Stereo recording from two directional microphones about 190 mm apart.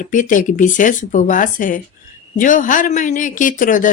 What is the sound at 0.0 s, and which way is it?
Speech, 45° left (ahead or behind).